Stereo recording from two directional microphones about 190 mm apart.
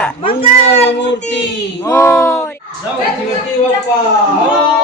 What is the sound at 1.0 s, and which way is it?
Speech, 65° left (ahead or behind).